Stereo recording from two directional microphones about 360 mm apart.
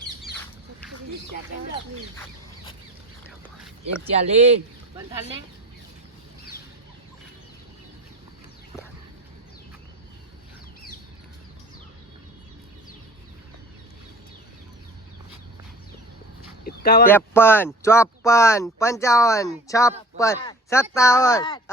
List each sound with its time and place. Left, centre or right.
4.1 s speech: centre
16.6 s a sound: left
17.1 s speech: centre